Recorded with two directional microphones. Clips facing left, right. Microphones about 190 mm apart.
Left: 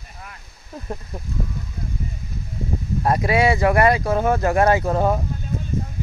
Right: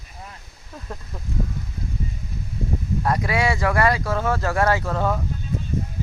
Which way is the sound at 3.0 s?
25° left (ahead or behind).